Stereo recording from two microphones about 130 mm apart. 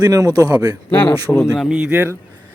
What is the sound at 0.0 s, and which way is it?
Speech, 30° right (ahead or behind).